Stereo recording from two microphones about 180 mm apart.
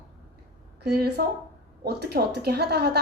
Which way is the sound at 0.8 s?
60° right (ahead or behind).